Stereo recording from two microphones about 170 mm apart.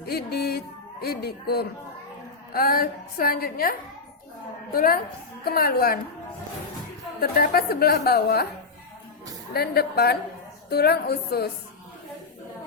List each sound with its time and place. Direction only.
0.0 s a woman's voice: 65° left (ahead or behind)
7.2 s a woman's voice: 65° left (ahead or behind)
9.5 s a woman's voice: 65° left (ahead or behind)